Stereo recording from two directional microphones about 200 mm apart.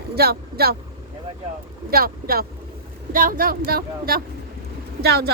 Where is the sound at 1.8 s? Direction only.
50° right (ahead or behind).